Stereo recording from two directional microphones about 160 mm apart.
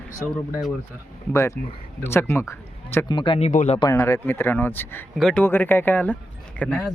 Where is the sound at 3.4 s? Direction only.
50° left (ahead or behind).